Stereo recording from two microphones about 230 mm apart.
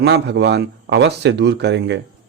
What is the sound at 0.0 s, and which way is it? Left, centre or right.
Speech, right.